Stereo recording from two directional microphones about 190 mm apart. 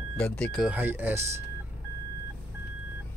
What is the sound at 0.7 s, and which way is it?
Speech, 10° right (ahead or behind).